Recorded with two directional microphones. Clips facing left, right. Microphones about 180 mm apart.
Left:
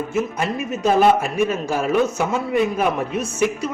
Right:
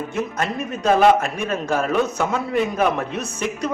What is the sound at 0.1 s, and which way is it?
A man's voice, 5° left (ahead or behind).